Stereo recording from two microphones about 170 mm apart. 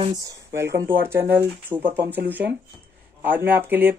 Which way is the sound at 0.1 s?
20° right (ahead or behind).